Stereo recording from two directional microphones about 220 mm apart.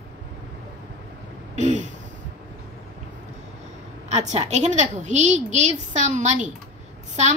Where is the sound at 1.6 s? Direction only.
35° right (ahead or behind).